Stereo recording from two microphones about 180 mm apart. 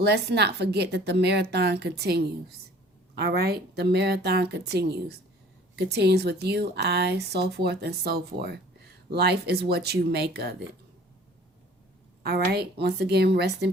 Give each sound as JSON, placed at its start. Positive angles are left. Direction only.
{"t": 0.0, "sound": "a woman's voice", "side_deg": -65}
{"t": 12.2, "sound": "a woman's voice", "side_deg": -60}